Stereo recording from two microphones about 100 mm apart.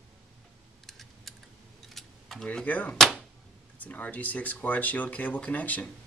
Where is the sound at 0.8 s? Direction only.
Centre (ahead or behind).